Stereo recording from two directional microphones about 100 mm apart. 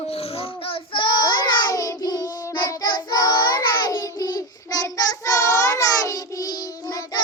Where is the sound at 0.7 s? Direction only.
50° left (ahead or behind).